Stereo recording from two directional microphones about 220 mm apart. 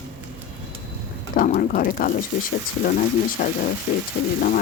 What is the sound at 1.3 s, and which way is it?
Speech, 40° left (ahead or behind).